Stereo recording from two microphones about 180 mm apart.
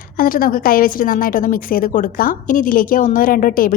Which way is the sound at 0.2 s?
50° left (ahead or behind).